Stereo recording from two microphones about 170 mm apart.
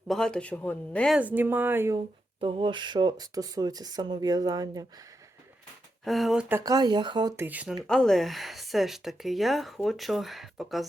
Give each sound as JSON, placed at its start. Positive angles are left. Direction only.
{"t": 0.1, "sound": "speech", "side_deg": 5}
{"t": 1.1, "sound": "speech", "side_deg": -10}
{"t": 2.4, "sound": "speech", "side_deg": -30}
{"t": 6.1, "sound": "speech", "side_deg": 0}
{"t": 6.6, "sound": "speech", "side_deg": -20}
{"t": 7.3, "sound": "speech", "side_deg": -10}
{"t": 7.9, "sound": "speech", "side_deg": 0}